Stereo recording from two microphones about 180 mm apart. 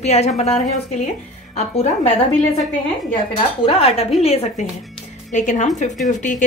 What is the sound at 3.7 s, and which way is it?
A woman's voice, 30° left (ahead or behind).